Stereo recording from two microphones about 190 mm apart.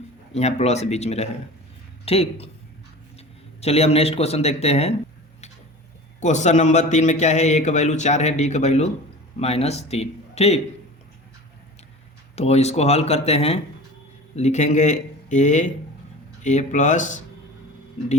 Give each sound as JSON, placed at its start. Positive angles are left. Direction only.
{"t": 0.3, "sound": "a man's voice", "side_deg": 35}
{"t": 6.1, "sound": "a man's voice", "side_deg": 40}
{"t": 12.4, "sound": "a man's voice", "side_deg": 35}